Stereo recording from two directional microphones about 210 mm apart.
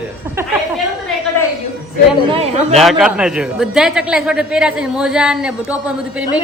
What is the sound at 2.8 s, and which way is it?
A man's voice, centre (ahead or behind).